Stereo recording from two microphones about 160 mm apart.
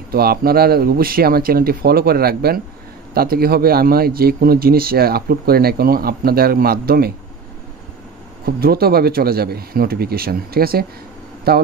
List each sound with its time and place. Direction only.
0.1 s speech: 70° right (ahead or behind)
8.5 s speech: 75° right (ahead or behind)